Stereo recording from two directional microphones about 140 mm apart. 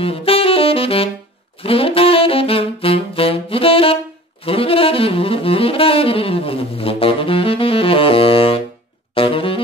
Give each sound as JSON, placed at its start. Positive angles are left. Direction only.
{"t": 0.0, "sound": "saxophone", "side_deg": 40}
{"t": 9.1, "sound": "music", "side_deg": 40}